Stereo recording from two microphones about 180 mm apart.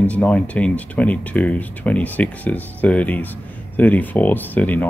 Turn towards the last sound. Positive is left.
turn(degrees=10)  # may be behind; listen again after turning